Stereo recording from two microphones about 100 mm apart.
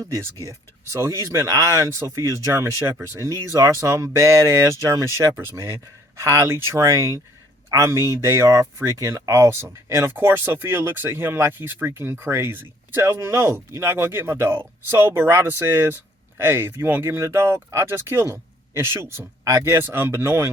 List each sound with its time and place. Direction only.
0.0 s speech: 30° right (ahead or behind)